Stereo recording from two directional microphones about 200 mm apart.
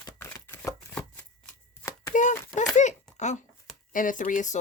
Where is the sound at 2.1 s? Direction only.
40° left (ahead or behind).